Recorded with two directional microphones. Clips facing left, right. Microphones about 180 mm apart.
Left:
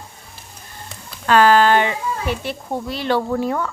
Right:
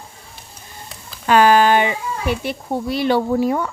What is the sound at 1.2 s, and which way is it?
A child's voice, 15° right (ahead or behind).